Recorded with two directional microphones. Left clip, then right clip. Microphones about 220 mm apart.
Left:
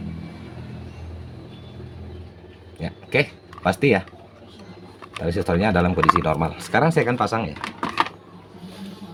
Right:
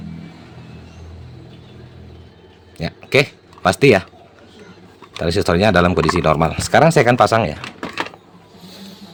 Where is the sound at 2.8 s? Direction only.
40° right (ahead or behind).